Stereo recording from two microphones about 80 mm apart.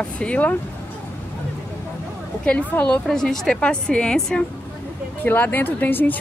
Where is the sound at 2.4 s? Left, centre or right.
Centre.